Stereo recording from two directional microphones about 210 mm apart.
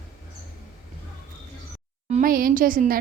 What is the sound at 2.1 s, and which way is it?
Speech, 40° right (ahead or behind).